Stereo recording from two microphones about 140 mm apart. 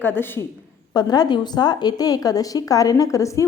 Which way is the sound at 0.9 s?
30° left (ahead or behind).